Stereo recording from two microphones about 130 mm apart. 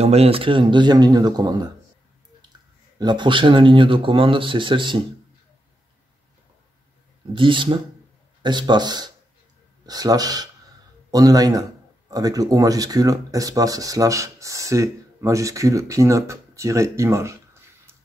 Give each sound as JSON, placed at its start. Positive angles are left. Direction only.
{"t": 0.0, "sound": "speech", "side_deg": -55}
{"t": 3.0, "sound": "speech", "side_deg": -35}
{"t": 7.3, "sound": "speech", "side_deg": -40}